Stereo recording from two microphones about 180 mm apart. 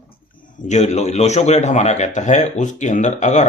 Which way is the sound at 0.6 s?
40° left (ahead or behind).